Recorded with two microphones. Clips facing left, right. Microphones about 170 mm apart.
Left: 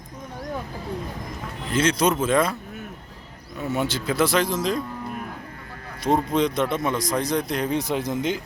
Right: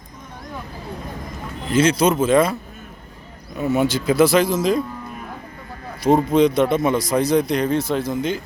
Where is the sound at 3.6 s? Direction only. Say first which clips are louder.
Right 6 dB; 10° right (ahead or behind).